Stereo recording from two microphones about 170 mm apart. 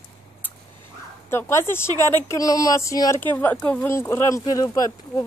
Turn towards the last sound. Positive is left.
turn(degrees=20)  # may be behind; listen again after turning